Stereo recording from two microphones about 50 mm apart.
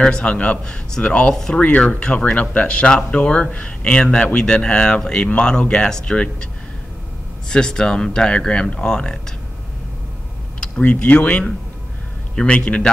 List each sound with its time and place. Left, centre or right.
0.0 s speech: left
1.6 s speech: left
10.8 s speech: left